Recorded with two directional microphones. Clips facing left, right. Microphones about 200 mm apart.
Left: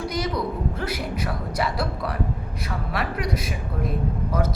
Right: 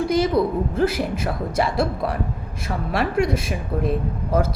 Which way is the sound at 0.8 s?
25° right (ahead or behind).